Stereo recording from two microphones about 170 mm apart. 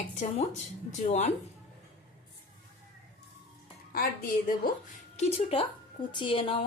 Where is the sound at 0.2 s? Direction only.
45° left (ahead or behind).